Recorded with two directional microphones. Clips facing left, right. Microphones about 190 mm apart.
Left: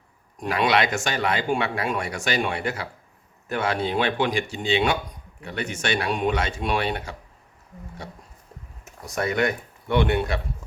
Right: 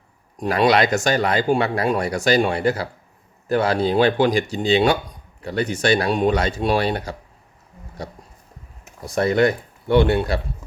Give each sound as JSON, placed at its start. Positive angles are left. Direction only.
{"t": 0.3, "sound": "speech", "side_deg": -35}